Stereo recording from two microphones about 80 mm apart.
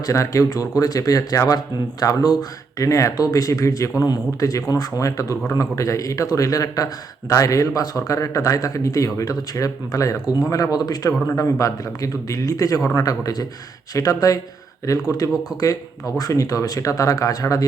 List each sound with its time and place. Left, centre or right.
0.0 s speech: left